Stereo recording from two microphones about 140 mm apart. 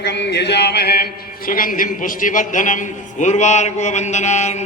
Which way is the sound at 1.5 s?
80° left.